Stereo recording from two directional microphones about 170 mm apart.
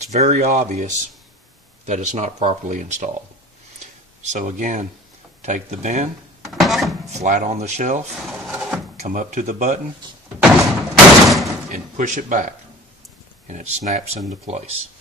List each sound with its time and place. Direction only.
0.0 s speech: 45° right (ahead or behind)
3.8 s a sound: 45° right (ahead or behind)
5.4 s speech: 45° right (ahead or behind)
6.5 s a sound: centre (ahead or behind)
7.1 s speech: 45° right (ahead or behind)
8.3 s wood: 5° right (ahead or behind)
9.0 s speech: 45° right (ahead or behind)
11.2 s slam: centre (ahead or behind)
11.7 s speech: 45° right (ahead or behind)